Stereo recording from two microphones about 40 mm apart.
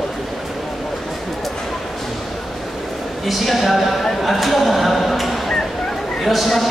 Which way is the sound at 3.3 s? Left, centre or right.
Centre.